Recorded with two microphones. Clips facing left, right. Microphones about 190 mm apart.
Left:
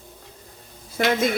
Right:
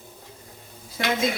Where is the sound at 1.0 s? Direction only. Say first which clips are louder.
Left 5 dB; 55° left (ahead or behind).